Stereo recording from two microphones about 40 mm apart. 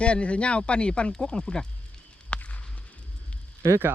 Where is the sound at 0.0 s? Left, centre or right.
Left.